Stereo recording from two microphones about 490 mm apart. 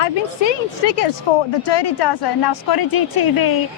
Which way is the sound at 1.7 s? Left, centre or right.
Left.